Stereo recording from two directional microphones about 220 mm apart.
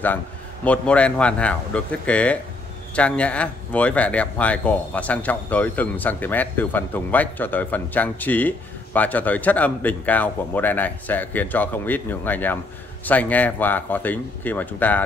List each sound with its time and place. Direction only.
0.7 s speech: 5° left (ahead or behind)